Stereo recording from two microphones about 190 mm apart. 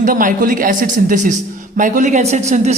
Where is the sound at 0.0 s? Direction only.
45° right (ahead or behind).